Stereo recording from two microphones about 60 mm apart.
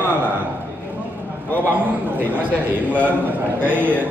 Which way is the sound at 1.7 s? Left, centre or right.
Right.